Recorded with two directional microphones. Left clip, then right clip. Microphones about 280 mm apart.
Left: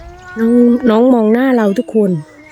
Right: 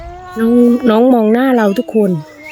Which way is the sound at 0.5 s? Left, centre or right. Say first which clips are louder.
Even; right.